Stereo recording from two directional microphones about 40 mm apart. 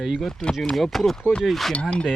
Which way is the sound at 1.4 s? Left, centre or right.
Centre.